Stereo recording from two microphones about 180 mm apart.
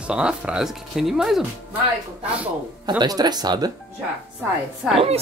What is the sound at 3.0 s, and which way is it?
Speech, 20° right (ahead or behind).